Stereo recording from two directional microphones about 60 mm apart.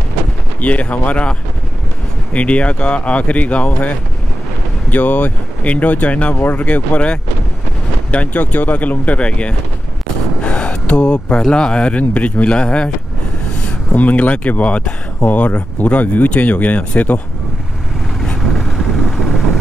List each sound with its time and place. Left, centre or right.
0.6 s speech: left
2.3 s speech: left
4.9 s speech: left
10.4 s a sound: centre
11.5 s speech: centre